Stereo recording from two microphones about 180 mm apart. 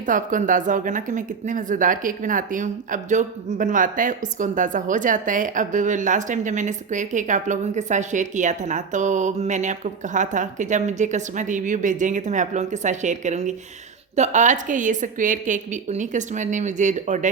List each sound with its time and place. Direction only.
0.0 s speech: 45° right (ahead or behind)